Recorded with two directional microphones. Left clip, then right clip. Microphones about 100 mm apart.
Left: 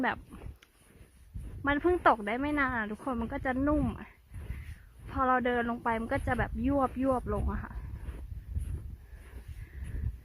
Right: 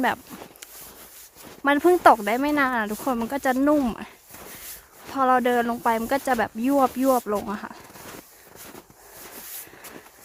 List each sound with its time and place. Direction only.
0.0 s a sound: 20° right (ahead or behind)
1.6 s speech: 35° right (ahead or behind)
5.0 s speech: 20° right (ahead or behind)